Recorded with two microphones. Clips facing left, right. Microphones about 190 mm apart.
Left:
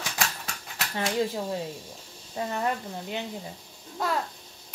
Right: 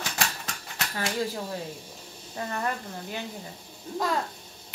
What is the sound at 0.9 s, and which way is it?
Speech, 25° left (ahead or behind).